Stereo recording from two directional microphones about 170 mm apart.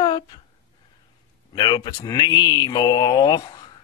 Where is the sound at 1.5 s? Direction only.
25° left (ahead or behind).